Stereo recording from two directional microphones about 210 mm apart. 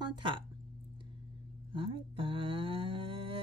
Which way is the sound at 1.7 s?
25° right (ahead or behind).